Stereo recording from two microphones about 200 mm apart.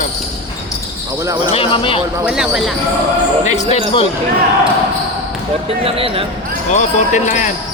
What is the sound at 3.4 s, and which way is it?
Speech, 35° left (ahead or behind).